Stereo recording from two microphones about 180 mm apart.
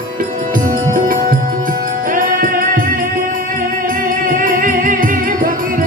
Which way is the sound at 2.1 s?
50° right (ahead or behind).